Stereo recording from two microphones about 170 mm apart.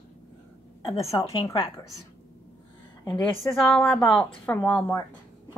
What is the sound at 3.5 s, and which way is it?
A woman's voice, centre (ahead or behind).